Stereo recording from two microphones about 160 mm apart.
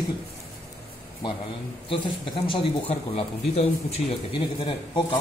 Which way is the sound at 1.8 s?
30° left (ahead or behind).